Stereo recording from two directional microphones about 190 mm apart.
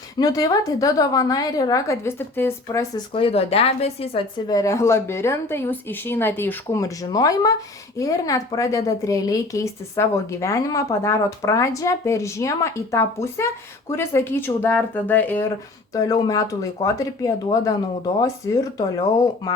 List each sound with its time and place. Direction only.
0.2 s a woman's voice: 20° left (ahead or behind)
3.2 s speech: 30° left (ahead or behind)
4.4 s a woman's voice: 15° left (ahead or behind)